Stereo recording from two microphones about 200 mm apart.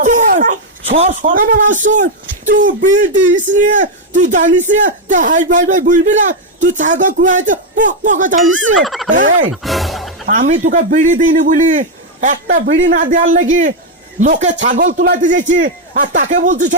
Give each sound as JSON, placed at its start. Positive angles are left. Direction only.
{"t": 0.0, "sound": "a sound", "side_deg": -40}
{"t": 0.9, "sound": "a man's voice", "side_deg": -35}
{"t": 8.8, "sound": "gobble", "side_deg": 0}
{"t": 9.0, "sound": "gobble", "side_deg": -40}
{"t": 9.5, "sound": "a sound", "side_deg": 0}
{"t": 10.2, "sound": "a man's voice", "side_deg": -40}
{"t": 12.5, "sound": "speech", "side_deg": -70}
{"t": 13.1, "sound": "a man's voice", "side_deg": -40}